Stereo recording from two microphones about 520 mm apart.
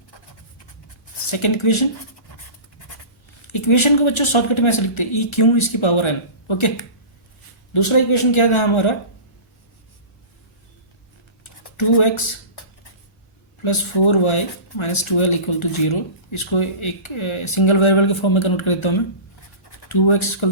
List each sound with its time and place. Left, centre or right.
1.3 s speech: left
3.4 s speech: left
7.7 s speech: left
11.6 s speech: left
13.6 s speech: left